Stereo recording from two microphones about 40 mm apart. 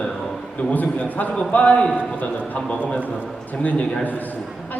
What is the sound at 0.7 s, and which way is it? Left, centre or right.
A man's voice, left.